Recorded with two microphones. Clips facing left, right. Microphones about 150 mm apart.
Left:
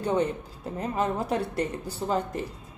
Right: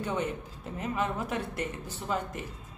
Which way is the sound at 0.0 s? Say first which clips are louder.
Left 6 dB; 35° left (ahead or behind).